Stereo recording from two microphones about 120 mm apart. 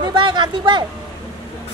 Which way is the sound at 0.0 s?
40° right (ahead or behind).